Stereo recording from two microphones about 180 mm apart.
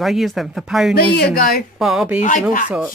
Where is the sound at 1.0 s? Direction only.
60° left (ahead or behind).